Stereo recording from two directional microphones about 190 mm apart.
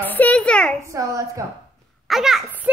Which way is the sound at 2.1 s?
Centre (ahead or behind).